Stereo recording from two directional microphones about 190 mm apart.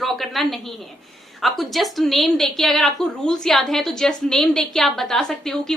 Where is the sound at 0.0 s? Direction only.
Centre (ahead or behind).